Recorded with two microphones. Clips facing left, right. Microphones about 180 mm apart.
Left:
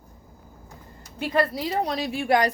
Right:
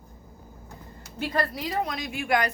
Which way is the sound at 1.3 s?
25° left (ahead or behind).